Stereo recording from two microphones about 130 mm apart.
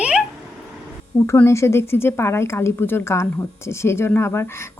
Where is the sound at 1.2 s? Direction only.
20° left (ahead or behind).